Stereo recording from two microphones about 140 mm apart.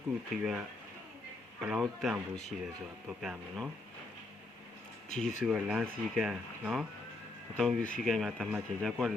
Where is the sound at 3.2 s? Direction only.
Centre (ahead or behind).